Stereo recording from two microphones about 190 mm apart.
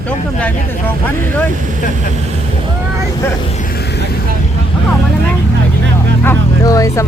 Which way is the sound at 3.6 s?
50° left (ahead or behind).